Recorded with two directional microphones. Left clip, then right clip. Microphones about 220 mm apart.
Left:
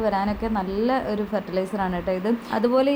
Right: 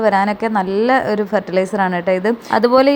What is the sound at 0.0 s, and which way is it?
A woman's voice, 30° right (ahead or behind).